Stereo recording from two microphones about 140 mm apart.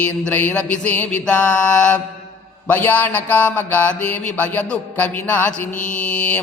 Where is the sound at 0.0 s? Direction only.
15° left (ahead or behind).